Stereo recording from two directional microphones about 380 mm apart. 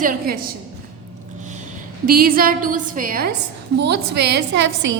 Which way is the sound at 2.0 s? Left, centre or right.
Right.